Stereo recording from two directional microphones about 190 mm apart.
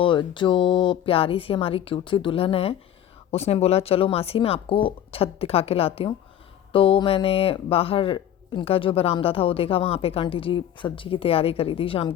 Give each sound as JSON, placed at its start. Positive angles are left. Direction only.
{"t": 0.0, "sound": "speech", "side_deg": 25}